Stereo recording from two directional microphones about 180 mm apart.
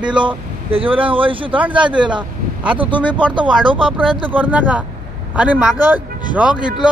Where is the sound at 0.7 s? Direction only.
30° right (ahead or behind).